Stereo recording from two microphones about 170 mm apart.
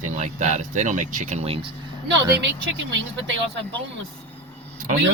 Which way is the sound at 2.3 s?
90° right.